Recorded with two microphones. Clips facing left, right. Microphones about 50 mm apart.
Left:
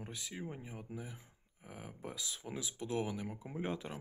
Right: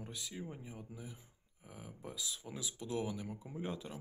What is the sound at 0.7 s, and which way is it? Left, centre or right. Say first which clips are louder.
Speech: left 3 dB; left.